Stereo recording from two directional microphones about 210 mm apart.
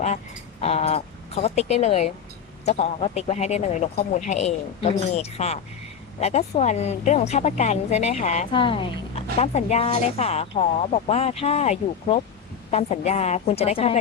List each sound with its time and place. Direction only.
0.6 s a woman's voice: 30° left (ahead or behind)